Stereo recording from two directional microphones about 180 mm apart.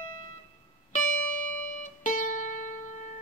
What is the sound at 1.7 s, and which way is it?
Music, 45° left (ahead or behind).